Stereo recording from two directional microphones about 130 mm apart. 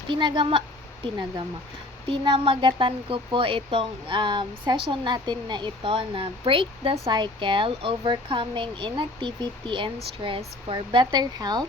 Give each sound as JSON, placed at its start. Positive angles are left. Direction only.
{"t": 0.1, "sound": "speech", "side_deg": -35}
{"t": 2.0, "sound": "speech", "side_deg": -40}